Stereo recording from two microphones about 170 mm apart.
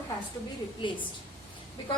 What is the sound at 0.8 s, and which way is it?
Speech, 30° left (ahead or behind).